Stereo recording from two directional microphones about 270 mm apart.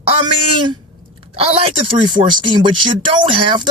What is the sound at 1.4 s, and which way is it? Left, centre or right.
Speech, right.